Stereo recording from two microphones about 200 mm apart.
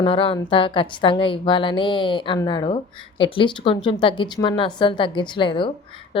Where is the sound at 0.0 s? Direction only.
25° left (ahead or behind).